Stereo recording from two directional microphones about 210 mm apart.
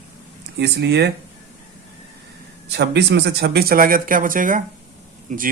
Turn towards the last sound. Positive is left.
turn(degrees=-40)  # may be behind; listen again after turning